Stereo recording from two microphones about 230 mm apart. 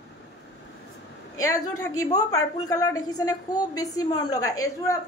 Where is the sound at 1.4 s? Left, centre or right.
Centre.